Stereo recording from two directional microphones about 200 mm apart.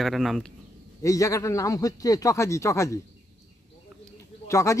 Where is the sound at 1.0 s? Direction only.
15° left (ahead or behind).